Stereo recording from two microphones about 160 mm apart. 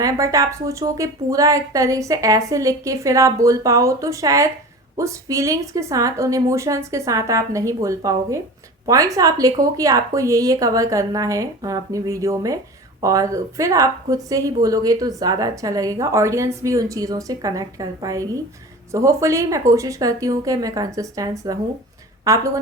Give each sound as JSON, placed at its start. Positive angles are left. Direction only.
{"t": 0.0, "sound": "a woman's voice", "side_deg": -20}